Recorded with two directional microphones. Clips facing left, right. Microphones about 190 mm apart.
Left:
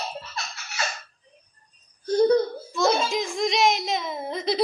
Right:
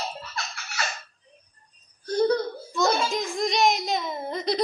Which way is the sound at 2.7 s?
Centre (ahead or behind).